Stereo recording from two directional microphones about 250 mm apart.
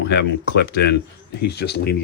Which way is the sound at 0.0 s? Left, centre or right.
Left.